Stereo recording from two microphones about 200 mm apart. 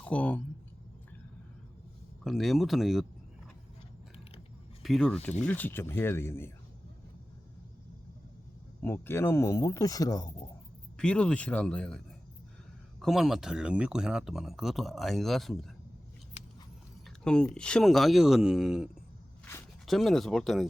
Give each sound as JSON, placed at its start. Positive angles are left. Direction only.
{"t": 0.0, "sound": "speech", "side_deg": 5}
{"t": 2.2, "sound": "speech", "side_deg": 0}
{"t": 4.8, "sound": "speech", "side_deg": 0}
{"t": 8.8, "sound": "speech", "side_deg": 10}
{"t": 10.9, "sound": "speech", "side_deg": 5}
{"t": 17.1, "sound": "speech", "side_deg": 5}